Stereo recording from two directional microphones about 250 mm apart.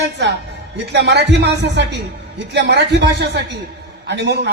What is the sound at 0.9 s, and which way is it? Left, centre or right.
A man's voice, right.